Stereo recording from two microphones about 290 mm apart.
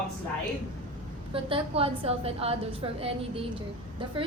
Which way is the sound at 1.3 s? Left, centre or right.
Centre.